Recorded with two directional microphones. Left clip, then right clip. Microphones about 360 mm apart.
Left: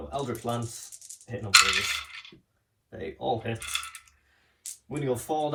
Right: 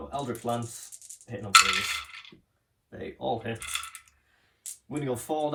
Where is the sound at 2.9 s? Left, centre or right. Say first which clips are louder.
Left 2 dB; centre.